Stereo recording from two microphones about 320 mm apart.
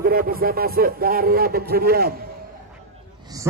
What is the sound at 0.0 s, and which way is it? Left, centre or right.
Speech, right.